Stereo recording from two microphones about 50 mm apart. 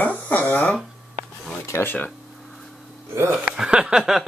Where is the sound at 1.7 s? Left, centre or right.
Left.